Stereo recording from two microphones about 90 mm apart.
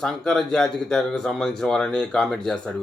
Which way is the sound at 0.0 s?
5° left (ahead or behind).